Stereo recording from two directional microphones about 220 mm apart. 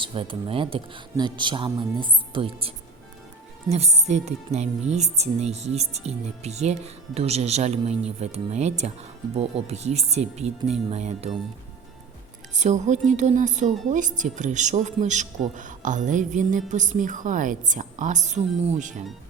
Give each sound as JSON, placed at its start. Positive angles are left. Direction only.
{"t": 0.0, "sound": "speech", "side_deg": -25}
{"t": 12.5, "sound": "speech", "side_deg": -30}